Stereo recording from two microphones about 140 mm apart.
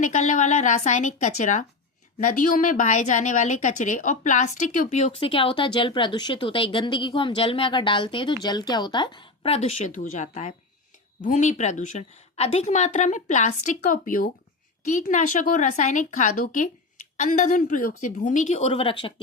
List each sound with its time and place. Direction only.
0.0 s a woman's voice: 60° left (ahead or behind); by 14.3 s 85° left
14.8 s a woman's voice: 60° left (ahead or behind); by 19.1 s 40° left (ahead or behind)